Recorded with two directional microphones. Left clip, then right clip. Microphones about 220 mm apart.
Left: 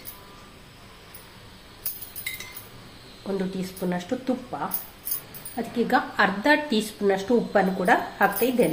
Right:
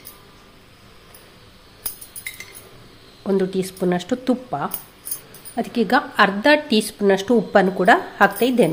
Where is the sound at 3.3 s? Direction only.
50° right (ahead or behind).